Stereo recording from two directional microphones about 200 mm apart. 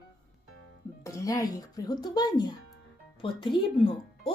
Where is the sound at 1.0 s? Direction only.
15° left (ahead or behind).